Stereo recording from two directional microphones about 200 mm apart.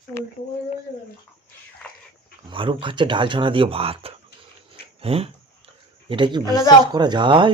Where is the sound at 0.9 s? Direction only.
40° left (ahead or behind).